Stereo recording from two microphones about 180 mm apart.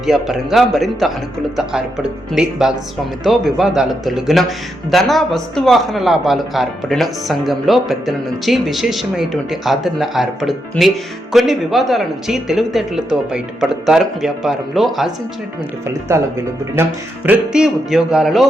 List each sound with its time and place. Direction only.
0.0 s speech: centre (ahead or behind)
15.9 s speech: 15° right (ahead or behind)
17.2 s speech: 5° right (ahead or behind)